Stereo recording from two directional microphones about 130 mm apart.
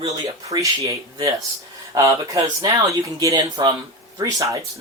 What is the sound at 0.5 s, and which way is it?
Speech, 25° right (ahead or behind).